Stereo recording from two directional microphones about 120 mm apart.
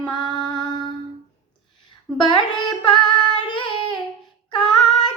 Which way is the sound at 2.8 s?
40° left (ahead or behind).